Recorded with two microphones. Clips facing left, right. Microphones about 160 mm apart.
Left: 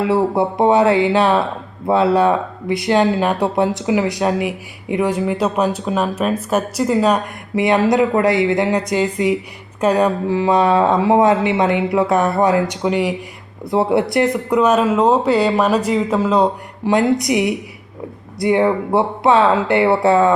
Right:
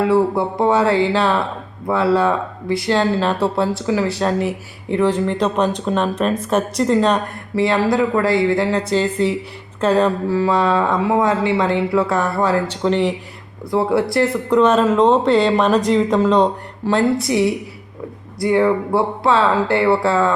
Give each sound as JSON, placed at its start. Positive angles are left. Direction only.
{"t": 0.0, "sound": "speech", "side_deg": 20}
{"t": 7.5, "sound": "speech", "side_deg": 20}
{"t": 13.7, "sound": "speech", "side_deg": 20}